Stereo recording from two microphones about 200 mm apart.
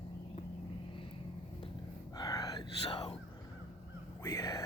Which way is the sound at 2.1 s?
20° left (ahead or behind).